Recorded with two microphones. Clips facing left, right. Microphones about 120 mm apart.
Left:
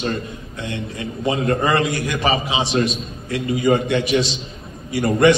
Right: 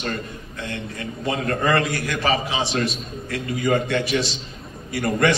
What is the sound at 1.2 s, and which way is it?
A man's voice, 20° left (ahead or behind).